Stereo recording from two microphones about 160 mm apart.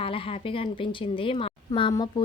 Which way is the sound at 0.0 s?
35° left (ahead or behind).